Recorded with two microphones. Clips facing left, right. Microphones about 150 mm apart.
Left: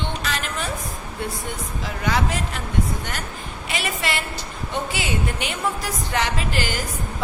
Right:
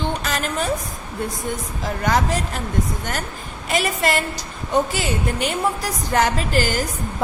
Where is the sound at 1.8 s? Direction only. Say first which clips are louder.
Right 4 dB; 45° right (ahead or behind).